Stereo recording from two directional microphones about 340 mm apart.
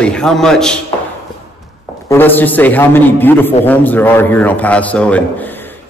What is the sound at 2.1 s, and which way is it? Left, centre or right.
A man's voice, centre.